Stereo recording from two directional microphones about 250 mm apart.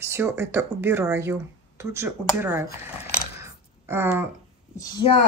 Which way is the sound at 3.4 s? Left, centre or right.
Centre.